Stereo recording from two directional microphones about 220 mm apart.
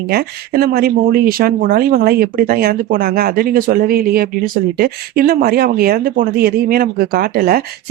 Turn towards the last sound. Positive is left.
turn(degrees=-45)  # may be behind; listen again after turning